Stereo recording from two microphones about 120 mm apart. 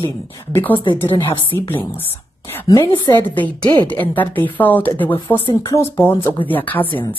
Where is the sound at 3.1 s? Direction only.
15° left (ahead or behind).